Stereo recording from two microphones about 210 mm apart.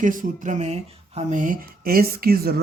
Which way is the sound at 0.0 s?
40° right (ahead or behind).